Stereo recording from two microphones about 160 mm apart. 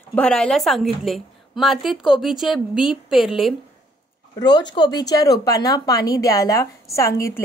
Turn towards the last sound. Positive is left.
turn(degrees=15)  # may be behind; listen again after turning